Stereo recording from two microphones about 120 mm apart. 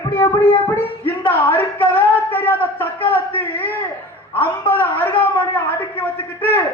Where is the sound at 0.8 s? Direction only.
15° left (ahead or behind).